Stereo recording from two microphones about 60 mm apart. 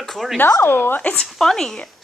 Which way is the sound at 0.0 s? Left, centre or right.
Centre.